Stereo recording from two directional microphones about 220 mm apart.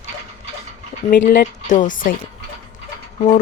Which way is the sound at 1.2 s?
35° left (ahead or behind).